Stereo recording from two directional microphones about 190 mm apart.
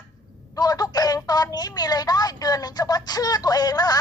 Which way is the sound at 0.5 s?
20° left (ahead or behind).